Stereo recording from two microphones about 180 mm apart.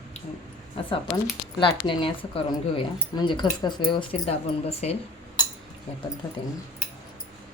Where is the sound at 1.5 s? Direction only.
25° left (ahead or behind).